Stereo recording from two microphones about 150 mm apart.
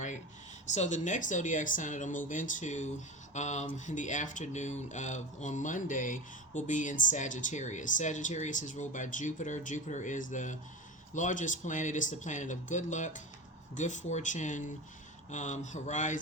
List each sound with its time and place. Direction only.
0.7 s speech: 50° left (ahead or behind)